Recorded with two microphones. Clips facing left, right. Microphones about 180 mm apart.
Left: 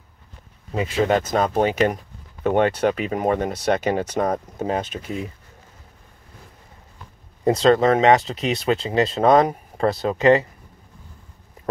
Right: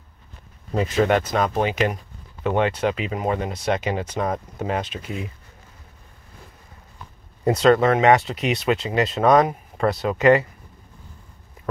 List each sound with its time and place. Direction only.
1.0 s speech: 35° left (ahead or behind)
7.4 s speech: 30° left (ahead or behind)